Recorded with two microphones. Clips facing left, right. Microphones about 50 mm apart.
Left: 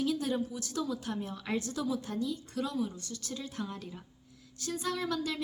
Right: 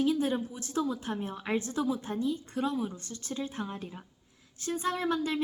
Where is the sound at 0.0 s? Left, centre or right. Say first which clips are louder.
Right 3 dB; right.